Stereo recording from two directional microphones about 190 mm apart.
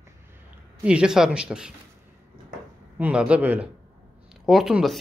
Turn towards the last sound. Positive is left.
turn(degrees=0)  # may be behind; listen again after turning